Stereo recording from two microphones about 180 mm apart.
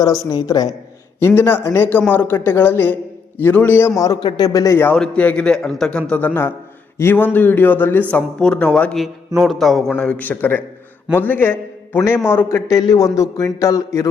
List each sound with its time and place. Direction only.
0.0 s a man's voice: 20° left (ahead or behind)
1.4 s a man's voice: 10° left (ahead or behind)